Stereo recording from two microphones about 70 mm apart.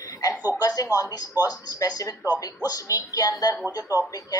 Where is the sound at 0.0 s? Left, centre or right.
Left.